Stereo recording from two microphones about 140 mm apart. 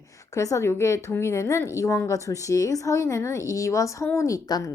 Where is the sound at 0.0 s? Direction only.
25° left (ahead or behind).